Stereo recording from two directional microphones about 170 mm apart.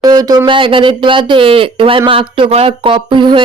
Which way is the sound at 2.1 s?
30° right (ahead or behind).